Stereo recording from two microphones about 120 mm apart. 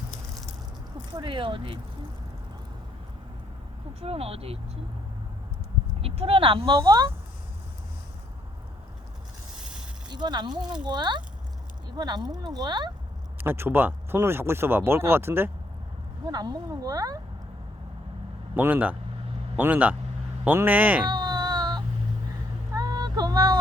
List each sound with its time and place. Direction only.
1.2 s speech: 45° right (ahead or behind)
4.0 s speech: 55° right (ahead or behind)
6.0 s speech: 55° right (ahead or behind)
6.7 s speech: 30° right (ahead or behind)
10.1 s speech: 40° right (ahead or behind)
13.4 s speech: 15° right (ahead or behind)
16.2 s speech: 35° right (ahead or behind)
18.5 s speech: 15° right (ahead or behind)
21.1 s child singing: 35° right (ahead or behind)
22.7 s a sound: 30° right (ahead or behind)